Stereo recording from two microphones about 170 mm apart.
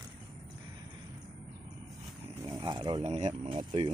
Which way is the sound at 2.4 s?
25° right (ahead or behind).